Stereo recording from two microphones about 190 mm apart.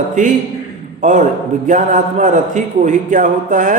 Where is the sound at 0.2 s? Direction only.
40° right (ahead or behind).